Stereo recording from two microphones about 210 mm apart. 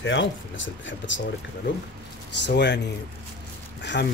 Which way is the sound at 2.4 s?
55° left (ahead or behind).